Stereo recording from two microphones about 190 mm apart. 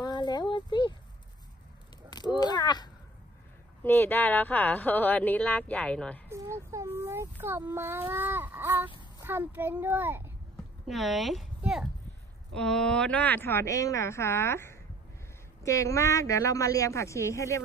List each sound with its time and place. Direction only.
0.0 s a sound: 20° left (ahead or behind)
2.0 s speech: 20° left (ahead or behind)
3.8 s speech: 10° left (ahead or behind)
6.2 s speech: 15° right (ahead or behind)
10.9 s speech: centre (ahead or behind); by 17.6 s 15° left (ahead or behind)